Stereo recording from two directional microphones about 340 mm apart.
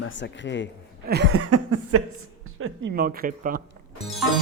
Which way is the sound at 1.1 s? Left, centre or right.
Right.